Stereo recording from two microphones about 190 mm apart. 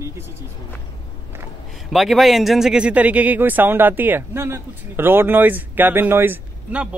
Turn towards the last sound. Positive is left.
turn(degrees=-10)  # may be behind; listen again after turning